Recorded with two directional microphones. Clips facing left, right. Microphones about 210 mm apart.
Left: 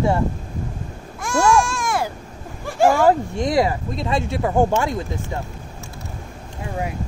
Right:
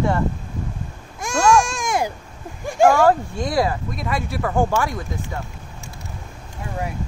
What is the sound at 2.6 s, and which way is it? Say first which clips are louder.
Speech: right 2 dB; 15° right (ahead or behind).